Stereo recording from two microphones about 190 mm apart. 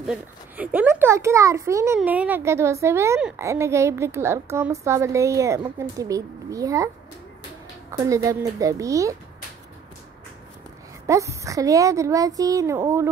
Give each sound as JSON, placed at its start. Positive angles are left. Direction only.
{"t": 0.0, "sound": "a woman's voice", "side_deg": -5}
{"t": 8.0, "sound": "a woman's voice", "side_deg": -15}
{"t": 11.1, "sound": "a woman's voice", "side_deg": -15}